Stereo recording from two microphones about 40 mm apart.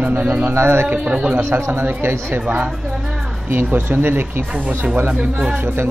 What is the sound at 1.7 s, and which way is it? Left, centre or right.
Speech, right.